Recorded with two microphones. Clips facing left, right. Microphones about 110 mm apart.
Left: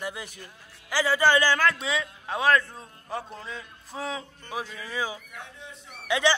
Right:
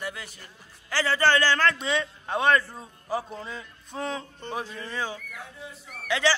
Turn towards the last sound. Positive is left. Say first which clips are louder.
# left 1 dB
turn(degrees=15)  # may be behind; listen again after turning